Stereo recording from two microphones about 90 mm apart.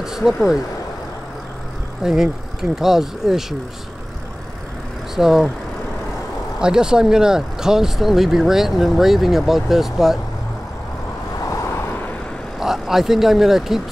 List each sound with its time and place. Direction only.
0.0 s speech: 5° right (ahead or behind)
2.0 s speech: 5° right (ahead or behind)
5.1 s speech: 5° right (ahead or behind)
6.6 s speech: 10° right (ahead or behind)
11.4 s vehicle: 35° left (ahead or behind)
12.5 s speech: 5° right (ahead or behind)